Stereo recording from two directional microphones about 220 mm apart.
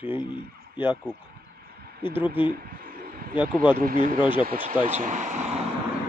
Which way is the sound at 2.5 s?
40° right (ahead or behind).